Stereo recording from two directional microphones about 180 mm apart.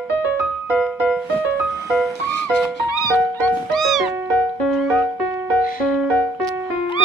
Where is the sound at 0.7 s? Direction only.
Centre (ahead or behind).